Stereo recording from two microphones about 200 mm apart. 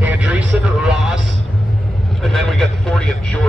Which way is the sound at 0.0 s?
5° right (ahead or behind).